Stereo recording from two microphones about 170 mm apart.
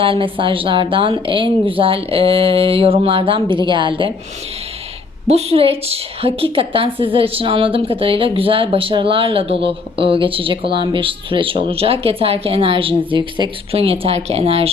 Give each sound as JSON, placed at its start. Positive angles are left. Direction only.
{"t": 0.0, "sound": "a woman's voice", "side_deg": -30}
{"t": 5.3, "sound": "a woman's voice", "side_deg": -35}